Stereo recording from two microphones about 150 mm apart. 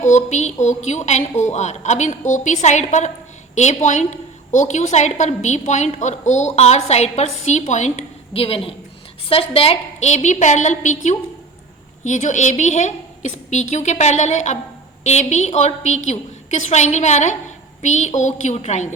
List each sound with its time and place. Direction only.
0.0 s a woman's voice: 50° left (ahead or behind)